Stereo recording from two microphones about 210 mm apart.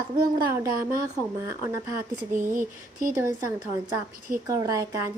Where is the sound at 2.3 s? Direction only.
40° right (ahead or behind).